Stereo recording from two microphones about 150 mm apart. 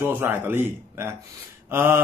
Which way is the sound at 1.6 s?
15° right (ahead or behind).